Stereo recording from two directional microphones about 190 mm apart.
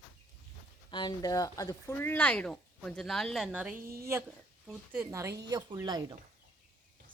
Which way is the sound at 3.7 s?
50° right (ahead or behind).